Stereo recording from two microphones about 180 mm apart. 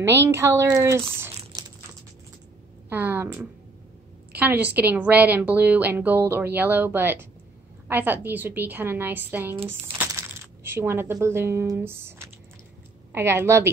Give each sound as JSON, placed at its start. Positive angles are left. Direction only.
{"t": 0.0, "sound": "a woman's voice", "side_deg": -10}
{"t": 1.3, "sound": "a sound", "side_deg": -25}
{"t": 2.9, "sound": "a woman's voice", "side_deg": -10}